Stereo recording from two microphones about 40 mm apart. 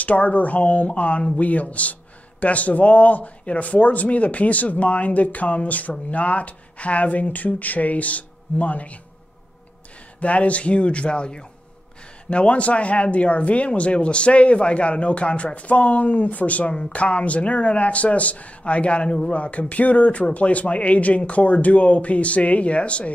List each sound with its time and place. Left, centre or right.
0.0 s speech: left
10.2 s speech: left